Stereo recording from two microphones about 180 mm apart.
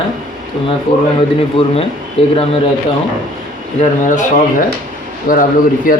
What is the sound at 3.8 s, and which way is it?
Speech, 45° left (ahead or behind).